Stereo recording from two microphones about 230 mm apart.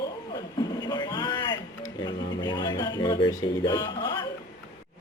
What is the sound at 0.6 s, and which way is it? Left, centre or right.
Speech, centre.